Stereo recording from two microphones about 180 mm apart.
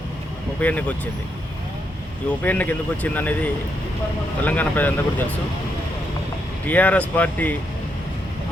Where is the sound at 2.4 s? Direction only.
10° left (ahead or behind).